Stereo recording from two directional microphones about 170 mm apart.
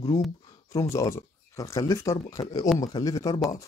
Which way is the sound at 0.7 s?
20° left (ahead or behind).